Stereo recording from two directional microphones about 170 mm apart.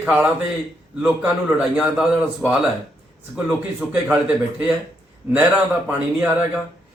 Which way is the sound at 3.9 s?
10° right (ahead or behind).